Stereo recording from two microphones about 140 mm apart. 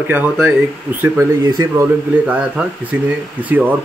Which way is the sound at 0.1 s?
10° right (ahead or behind).